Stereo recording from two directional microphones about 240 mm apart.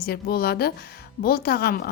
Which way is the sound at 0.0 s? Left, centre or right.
Left.